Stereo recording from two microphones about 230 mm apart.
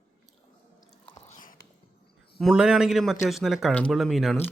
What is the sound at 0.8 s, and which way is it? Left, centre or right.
Biting, left.